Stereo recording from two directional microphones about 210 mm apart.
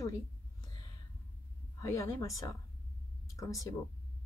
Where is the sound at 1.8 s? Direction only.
15° left (ahead or behind).